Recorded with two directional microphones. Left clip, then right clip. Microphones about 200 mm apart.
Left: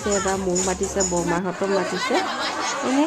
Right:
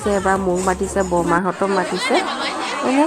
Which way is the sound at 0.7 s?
10° right (ahead or behind).